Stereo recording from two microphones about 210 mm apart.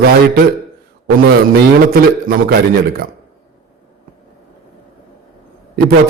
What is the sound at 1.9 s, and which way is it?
Speech, 45° right (ahead or behind).